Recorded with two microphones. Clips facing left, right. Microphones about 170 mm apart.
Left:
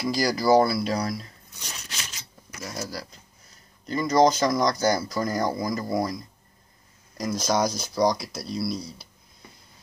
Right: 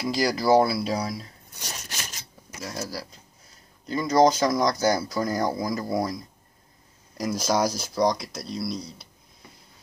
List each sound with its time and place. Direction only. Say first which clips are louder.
0.0 s speech: even; centre (ahead or behind)
1.7 s a sound: right 2 dB; 45° right (ahead or behind)
2.6 s speech: right 1 dB; 5° right (ahead or behind)